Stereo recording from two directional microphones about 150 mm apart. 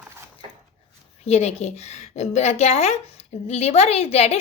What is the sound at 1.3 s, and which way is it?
A woman's voice, 45° left (ahead or behind).